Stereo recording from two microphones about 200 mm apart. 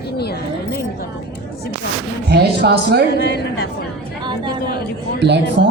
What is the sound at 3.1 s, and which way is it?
Speech, 60° left (ahead or behind).